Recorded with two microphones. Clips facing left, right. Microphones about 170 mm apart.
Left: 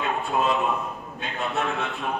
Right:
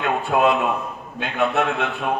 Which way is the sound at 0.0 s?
70° right (ahead or behind).